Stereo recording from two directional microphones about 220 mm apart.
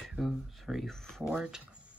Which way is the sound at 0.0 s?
Centre (ahead or behind).